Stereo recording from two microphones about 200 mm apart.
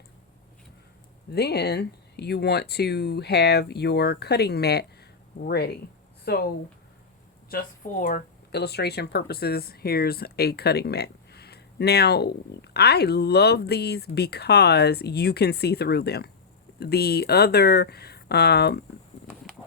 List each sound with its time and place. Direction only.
1.3 s speech: 55° left (ahead or behind)
8.0 s speech: 50° left (ahead or behind)